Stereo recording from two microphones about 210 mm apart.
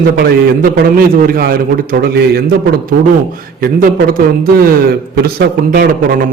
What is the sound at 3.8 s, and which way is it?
A man's voice, 40° right (ahead or behind).